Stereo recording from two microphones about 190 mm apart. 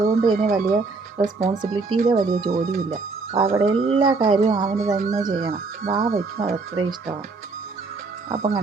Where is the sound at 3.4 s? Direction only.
30° right (ahead or behind).